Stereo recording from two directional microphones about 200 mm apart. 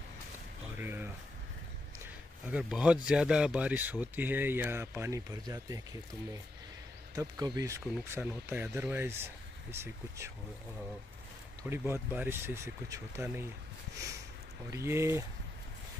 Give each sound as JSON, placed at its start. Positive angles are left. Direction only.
{"t": 0.7, "sound": "a sound", "side_deg": -10}
{"t": 2.5, "sound": "speech", "side_deg": -5}
{"t": 7.2, "sound": "speech", "side_deg": -20}
{"t": 11.7, "sound": "speech", "side_deg": -10}
{"t": 14.7, "sound": "speech", "side_deg": -15}